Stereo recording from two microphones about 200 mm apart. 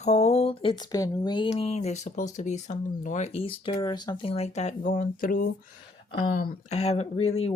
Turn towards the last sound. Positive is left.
turn(degrees=30)  # may be behind; listen again after turning